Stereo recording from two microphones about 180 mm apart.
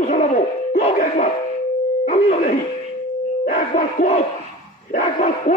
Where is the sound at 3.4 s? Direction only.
45° left (ahead or behind).